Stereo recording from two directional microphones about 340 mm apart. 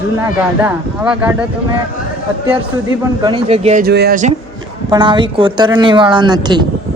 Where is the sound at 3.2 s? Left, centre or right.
Centre.